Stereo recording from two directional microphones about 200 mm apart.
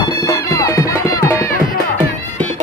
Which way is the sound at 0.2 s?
15° left (ahead or behind).